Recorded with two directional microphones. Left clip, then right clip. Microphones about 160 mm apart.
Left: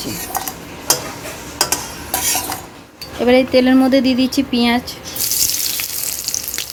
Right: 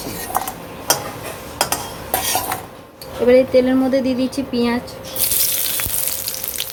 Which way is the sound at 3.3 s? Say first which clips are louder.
Even; 65° left (ahead or behind).